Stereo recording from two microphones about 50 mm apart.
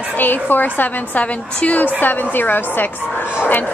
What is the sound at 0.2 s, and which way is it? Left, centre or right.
A woman's voice, left.